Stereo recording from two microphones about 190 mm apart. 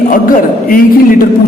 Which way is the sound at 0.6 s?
50° left (ahead or behind).